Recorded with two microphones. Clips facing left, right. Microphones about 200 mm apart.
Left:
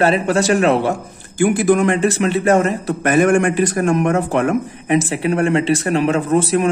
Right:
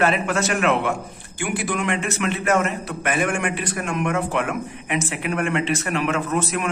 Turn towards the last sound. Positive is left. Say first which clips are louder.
# left 8 dB
turn(degrees=30)  # may be behind; listen again after turning